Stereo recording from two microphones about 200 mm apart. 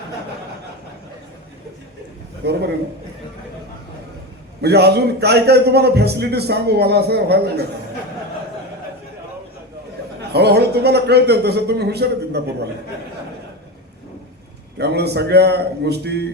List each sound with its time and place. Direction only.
2.4 s a man's voice: 55° right (ahead or behind)
4.6 s a man's voice: 55° right (ahead or behind)
10.2 s a man's voice: 55° right (ahead or behind)
14.8 s a man's voice: 55° right (ahead or behind)